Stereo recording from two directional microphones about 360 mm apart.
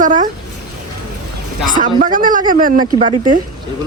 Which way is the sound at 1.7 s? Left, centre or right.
Right.